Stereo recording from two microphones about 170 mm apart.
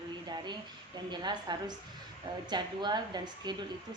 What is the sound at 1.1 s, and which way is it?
A woman's voice, 25° right (ahead or behind).